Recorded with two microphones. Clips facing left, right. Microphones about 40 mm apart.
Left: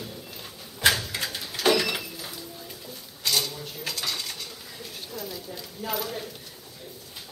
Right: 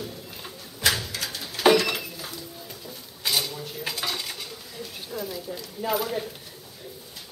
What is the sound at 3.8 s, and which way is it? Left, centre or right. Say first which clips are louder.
Dishes: right 1 dB; centre.